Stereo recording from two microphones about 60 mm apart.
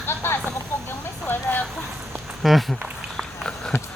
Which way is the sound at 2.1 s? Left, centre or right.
Centre.